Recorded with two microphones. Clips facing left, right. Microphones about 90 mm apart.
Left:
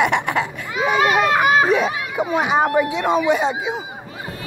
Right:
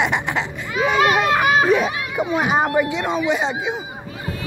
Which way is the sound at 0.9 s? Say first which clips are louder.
Left 1 dB; 30° left (ahead or behind).